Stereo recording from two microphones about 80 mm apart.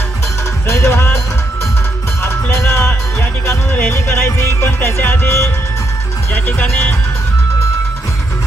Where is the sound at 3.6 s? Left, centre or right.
Left.